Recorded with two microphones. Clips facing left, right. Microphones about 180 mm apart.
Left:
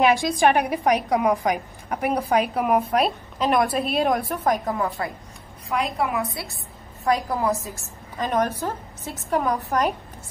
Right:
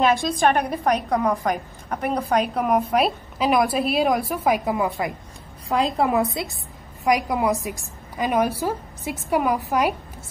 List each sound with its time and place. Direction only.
0.0 s a woman's voice: 15° left (ahead or behind); by 5.1 s 15° right (ahead or behind)
6.4 s a woman's voice: 20° right (ahead or behind)